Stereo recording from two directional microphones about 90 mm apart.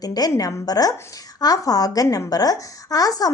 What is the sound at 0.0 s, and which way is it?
A woman's voice, 45° left (ahead or behind).